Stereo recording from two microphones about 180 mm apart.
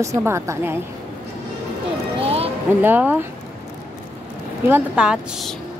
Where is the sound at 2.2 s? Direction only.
35° right (ahead or behind).